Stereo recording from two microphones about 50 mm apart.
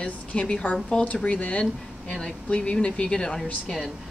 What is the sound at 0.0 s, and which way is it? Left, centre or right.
A woman's voice, left.